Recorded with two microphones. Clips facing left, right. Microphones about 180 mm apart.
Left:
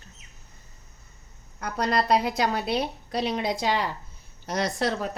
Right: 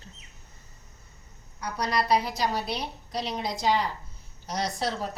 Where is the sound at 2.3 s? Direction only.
60° left (ahead or behind).